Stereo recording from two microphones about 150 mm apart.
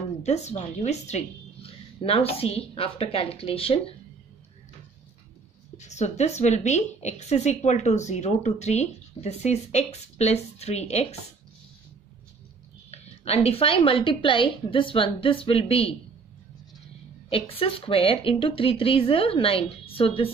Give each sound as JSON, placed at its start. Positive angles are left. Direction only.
{"t": 0.2, "sound": "speech", "side_deg": 50}
{"t": 5.8, "sound": "a woman's voice", "side_deg": 50}
{"t": 12.9, "sound": "speech", "side_deg": 45}
{"t": 17.3, "sound": "speech", "side_deg": 40}